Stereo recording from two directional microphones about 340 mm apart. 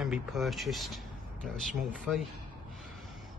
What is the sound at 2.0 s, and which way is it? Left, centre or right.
Speech, centre.